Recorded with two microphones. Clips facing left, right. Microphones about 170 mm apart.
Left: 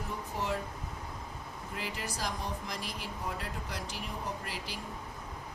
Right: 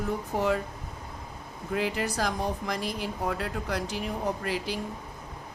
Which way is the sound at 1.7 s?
70° right (ahead or behind).